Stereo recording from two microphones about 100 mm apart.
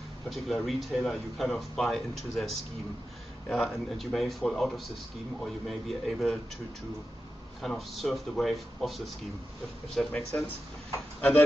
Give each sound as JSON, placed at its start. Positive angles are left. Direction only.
{"t": 0.3, "sound": "speech", "side_deg": 0}
{"t": 7.6, "sound": "speech", "side_deg": 0}